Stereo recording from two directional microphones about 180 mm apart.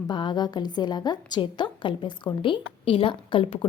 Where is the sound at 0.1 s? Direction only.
25° left (ahead or behind).